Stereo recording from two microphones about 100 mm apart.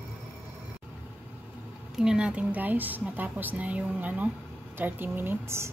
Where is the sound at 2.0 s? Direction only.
10° right (ahead or behind); by 5.7 s 25° right (ahead or behind).